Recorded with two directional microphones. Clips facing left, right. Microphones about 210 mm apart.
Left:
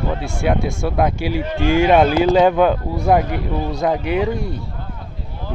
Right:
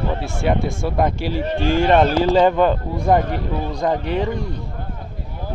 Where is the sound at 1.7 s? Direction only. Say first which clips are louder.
Left 2 dB; 5° left (ahead or behind).